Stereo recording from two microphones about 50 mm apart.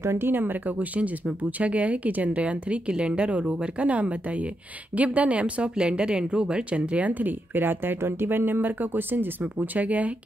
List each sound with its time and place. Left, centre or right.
0.0 s speech: right
0.3 s speech: right